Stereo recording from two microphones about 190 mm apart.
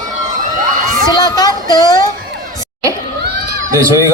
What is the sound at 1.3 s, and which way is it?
Speech, 20° left (ahead or behind).